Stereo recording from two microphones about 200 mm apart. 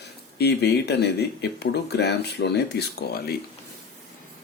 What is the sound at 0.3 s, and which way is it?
Speech, 55° left (ahead or behind).